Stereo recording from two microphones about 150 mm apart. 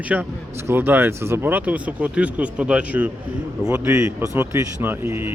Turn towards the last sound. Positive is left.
turn(degrees=-15)  # may be behind; listen again after turning